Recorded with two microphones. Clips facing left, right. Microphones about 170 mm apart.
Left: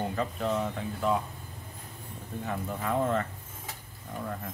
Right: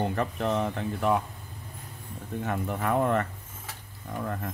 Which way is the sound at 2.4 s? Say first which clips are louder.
Right 3 dB; 65° right (ahead or behind).